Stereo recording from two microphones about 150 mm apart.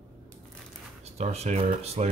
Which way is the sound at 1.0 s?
45° right (ahead or behind).